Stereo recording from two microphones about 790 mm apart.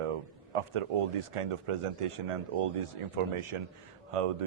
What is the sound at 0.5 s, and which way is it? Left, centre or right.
A man's voice, right.